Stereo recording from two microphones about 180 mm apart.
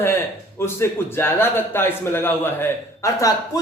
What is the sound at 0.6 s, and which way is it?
A man's voice, 15° left (ahead or behind).